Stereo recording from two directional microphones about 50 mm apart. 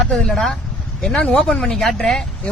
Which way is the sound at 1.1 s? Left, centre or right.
Left.